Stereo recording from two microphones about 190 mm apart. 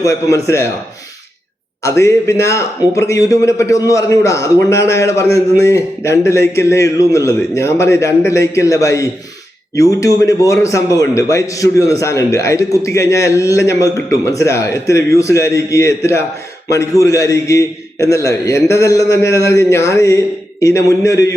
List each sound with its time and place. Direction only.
0.0 s a man's voice: 15° left (ahead or behind)
1.8 s a man's voice: 15° left (ahead or behind)